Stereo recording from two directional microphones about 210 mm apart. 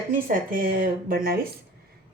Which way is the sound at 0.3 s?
40° right (ahead or behind).